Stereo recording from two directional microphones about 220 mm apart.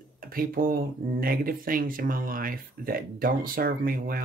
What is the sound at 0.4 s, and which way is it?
Speech, 40° right (ahead or behind).